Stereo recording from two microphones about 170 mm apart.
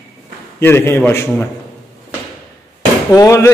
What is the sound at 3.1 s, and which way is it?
Speech, 20° left (ahead or behind).